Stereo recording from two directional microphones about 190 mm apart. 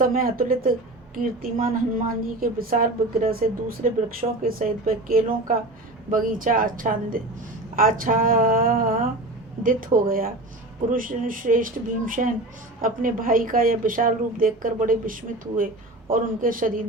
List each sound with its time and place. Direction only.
0.0 s a woman's voice: 50° right (ahead or behind)